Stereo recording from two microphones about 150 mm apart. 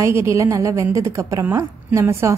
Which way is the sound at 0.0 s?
20° right (ahead or behind).